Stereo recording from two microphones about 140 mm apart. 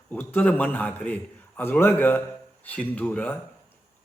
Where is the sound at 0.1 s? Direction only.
10° left (ahead or behind).